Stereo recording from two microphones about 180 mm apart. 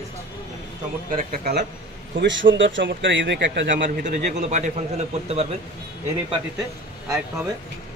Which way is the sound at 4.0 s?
50° right (ahead or behind).